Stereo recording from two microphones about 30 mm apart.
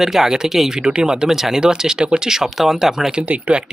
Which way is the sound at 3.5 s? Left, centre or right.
Right.